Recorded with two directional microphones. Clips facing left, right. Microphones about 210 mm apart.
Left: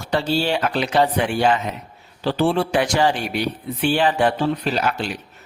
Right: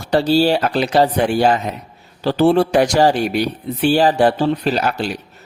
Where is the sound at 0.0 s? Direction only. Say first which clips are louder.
Right 7 dB; 40° right (ahead or behind).